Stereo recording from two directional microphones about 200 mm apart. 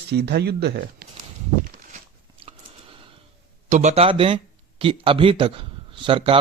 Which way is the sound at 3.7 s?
35° right (ahead or behind).